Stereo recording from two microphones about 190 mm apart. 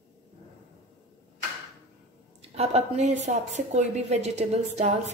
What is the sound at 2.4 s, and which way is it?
A woman's voice, 35° right (ahead or behind).